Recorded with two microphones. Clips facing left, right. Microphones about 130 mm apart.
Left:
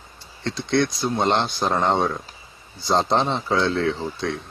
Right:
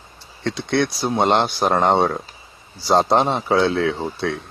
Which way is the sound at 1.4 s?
70° right (ahead or behind).